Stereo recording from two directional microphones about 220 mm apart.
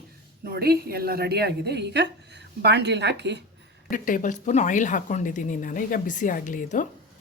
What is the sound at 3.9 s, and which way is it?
A woman's voice, 35° left (ahead or behind).